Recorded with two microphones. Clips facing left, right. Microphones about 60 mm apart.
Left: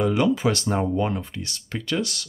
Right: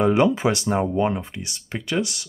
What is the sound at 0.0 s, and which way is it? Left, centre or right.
Speech, right.